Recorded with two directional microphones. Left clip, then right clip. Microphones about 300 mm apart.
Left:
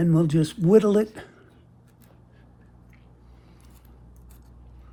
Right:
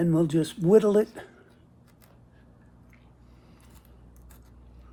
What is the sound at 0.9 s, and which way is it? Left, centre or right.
Speech, left.